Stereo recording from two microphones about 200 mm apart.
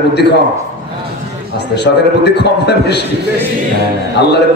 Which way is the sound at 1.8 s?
55° left (ahead or behind).